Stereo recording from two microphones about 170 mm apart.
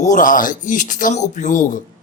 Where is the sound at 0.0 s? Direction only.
50° left (ahead or behind).